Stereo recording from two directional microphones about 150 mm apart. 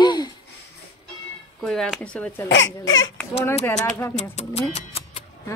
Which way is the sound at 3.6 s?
20° left (ahead or behind).